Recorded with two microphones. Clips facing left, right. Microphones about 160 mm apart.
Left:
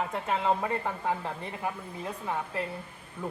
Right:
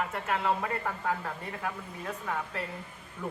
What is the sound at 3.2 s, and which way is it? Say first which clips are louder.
Speech: left 1 dB; 30° left (ahead or behind).